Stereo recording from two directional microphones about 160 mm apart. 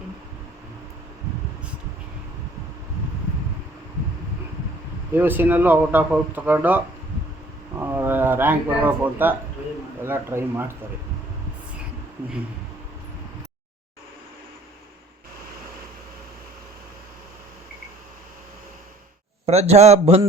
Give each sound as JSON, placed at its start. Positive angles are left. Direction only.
{"t": 5.1, "sound": "speech", "side_deg": -10}
{"t": 19.5, "sound": "a man's voice", "side_deg": -40}